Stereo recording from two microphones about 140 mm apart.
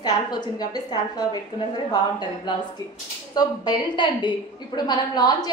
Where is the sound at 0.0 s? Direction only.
30° left (ahead or behind).